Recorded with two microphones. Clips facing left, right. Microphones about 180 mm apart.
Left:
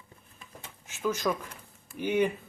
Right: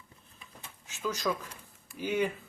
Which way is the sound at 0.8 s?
15° left (ahead or behind).